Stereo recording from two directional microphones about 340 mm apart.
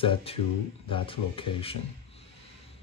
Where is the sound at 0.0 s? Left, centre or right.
Centre.